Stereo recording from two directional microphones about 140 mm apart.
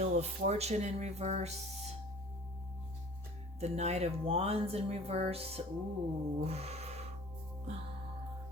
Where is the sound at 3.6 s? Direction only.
50° right (ahead or behind).